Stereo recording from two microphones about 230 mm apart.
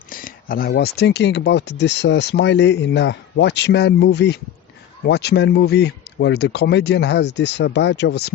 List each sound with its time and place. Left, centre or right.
0.1 s speech: left